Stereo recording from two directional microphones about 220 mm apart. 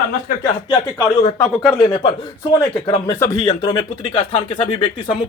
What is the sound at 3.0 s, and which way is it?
Speech, 15° left (ahead or behind).